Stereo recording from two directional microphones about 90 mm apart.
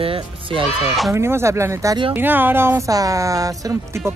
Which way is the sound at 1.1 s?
30° right (ahead or behind).